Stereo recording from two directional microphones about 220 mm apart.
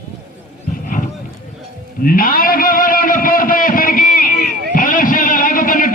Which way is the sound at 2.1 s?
40° left (ahead or behind).